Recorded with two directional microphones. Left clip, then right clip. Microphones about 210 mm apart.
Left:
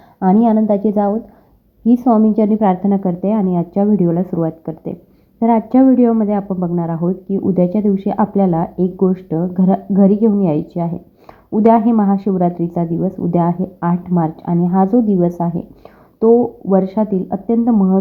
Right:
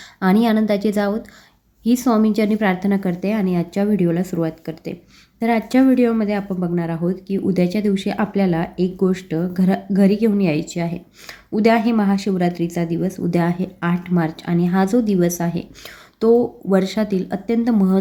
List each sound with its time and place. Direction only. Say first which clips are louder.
0.2 s a woman's voice: left 4 dB; centre (ahead or behind)
9.3 s speech: left 3 dB; 20° right (ahead or behind)
10.0 s a woman's voice: left 3 dB; centre (ahead or behind)
16.2 s speech: left 4 dB; 20° right (ahead or behind)
16.7 s a woman's voice: left 3 dB; centre (ahead or behind)
17.5 s speech: left 4 dB; 20° right (ahead or behind)